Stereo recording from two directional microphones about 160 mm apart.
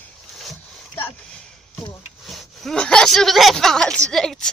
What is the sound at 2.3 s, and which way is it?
A woman's voice, centre (ahead or behind).